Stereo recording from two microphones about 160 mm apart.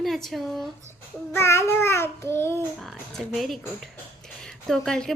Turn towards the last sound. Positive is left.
turn(degrees=5)  # may be behind; listen again after turning